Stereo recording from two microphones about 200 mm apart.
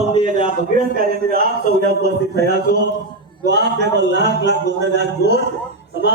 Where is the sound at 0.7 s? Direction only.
45° right (ahead or behind).